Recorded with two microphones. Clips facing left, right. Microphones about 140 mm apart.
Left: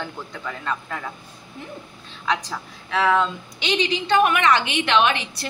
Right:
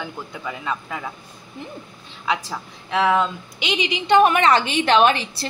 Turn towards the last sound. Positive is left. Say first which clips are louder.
# right 3 dB
turn(degrees=-35)  # may be behind; listen again after turning